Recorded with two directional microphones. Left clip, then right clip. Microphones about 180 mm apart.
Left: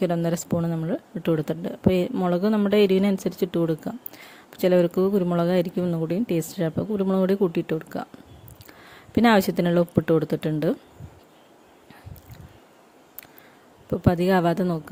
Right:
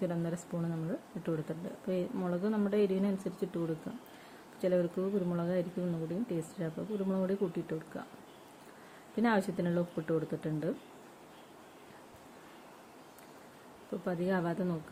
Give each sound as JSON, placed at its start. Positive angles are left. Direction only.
{"t": 0.0, "sound": "a woman's voice", "side_deg": 60}
{"t": 4.6, "sound": "a woman's voice", "side_deg": 65}
{"t": 9.1, "sound": "a woman's voice", "side_deg": 65}
{"t": 14.0, "sound": "a woman's voice", "side_deg": 65}